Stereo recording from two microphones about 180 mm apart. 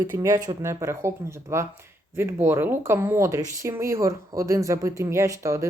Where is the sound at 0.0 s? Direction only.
15° right (ahead or behind).